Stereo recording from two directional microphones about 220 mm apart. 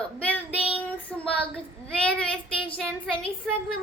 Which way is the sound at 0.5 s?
25° left (ahead or behind).